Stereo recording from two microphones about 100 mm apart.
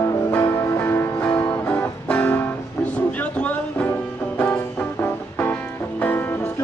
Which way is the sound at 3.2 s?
15° left (ahead or behind).